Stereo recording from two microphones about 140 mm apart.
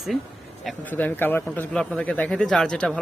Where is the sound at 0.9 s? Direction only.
15° left (ahead or behind).